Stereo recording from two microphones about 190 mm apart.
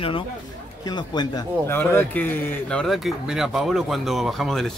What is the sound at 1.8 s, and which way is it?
Speech, 10° left (ahead or behind).